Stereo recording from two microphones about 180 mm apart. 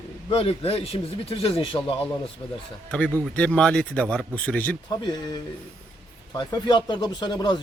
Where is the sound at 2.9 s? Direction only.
5° left (ahead or behind).